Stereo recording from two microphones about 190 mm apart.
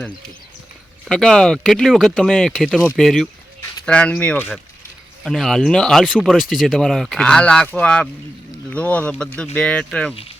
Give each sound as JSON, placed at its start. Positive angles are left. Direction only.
{"t": 1.0, "sound": "speech", "side_deg": 5}